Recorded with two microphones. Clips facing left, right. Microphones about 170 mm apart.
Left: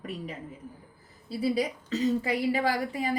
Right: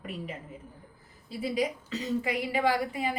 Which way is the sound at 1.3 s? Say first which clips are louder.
Left 2 dB; 35° left (ahead or behind).